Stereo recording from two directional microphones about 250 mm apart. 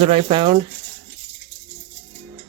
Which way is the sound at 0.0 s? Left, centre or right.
Right.